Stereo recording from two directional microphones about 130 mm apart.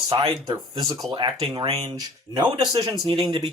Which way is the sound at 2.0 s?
30° right (ahead or behind).